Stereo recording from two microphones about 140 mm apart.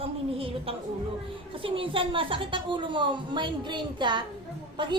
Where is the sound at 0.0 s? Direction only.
40° right (ahead or behind).